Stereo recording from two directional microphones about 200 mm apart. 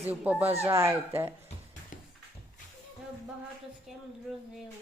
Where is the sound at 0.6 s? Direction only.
15° right (ahead or behind).